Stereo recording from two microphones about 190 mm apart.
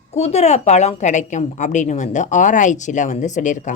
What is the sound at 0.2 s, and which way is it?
Speech, 35° left (ahead or behind).